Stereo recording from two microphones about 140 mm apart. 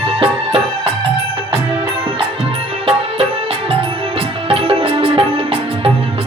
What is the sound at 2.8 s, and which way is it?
Music, 40° right (ahead or behind).